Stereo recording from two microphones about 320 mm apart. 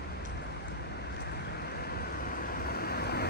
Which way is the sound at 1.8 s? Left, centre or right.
Left.